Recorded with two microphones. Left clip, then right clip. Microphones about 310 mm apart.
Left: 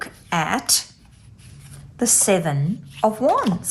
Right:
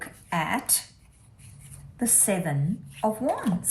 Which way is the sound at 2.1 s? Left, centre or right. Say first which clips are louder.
Left 8 dB; centre.